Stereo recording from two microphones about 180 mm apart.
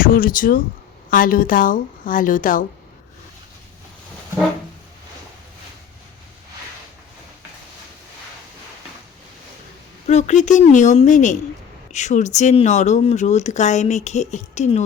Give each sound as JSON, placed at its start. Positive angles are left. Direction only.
{"t": 0.0, "sound": "a woman's voice", "side_deg": 50}
{"t": 10.1, "sound": "a woman's voice", "side_deg": 40}